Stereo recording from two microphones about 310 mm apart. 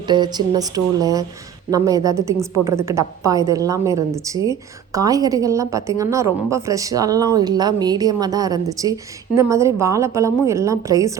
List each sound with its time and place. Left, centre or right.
0.1 s a woman's voice: centre